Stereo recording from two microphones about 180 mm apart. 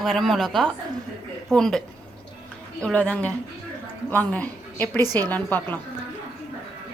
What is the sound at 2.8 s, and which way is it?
A woman's voice, 5° left (ahead or behind).